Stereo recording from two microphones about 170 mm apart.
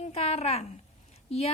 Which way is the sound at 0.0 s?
40° left (ahead or behind).